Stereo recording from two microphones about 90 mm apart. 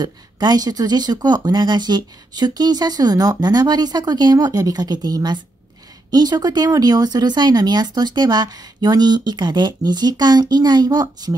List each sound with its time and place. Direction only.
0.0 s speech: 50° right (ahead or behind)